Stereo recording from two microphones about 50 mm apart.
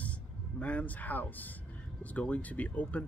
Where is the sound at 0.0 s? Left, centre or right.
Left.